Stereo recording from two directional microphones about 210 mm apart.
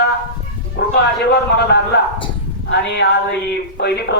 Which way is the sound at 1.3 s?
50° left (ahead or behind).